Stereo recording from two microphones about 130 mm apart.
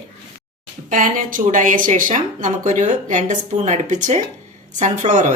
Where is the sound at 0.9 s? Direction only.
90° right.